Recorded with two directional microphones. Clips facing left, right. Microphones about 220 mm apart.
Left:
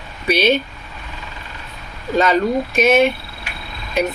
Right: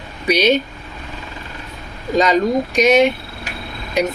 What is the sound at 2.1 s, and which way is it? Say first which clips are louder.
Speech: right 1 dB; 15° right (ahead or behind).